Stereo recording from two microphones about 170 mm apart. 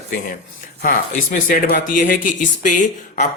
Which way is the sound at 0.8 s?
55° left (ahead or behind).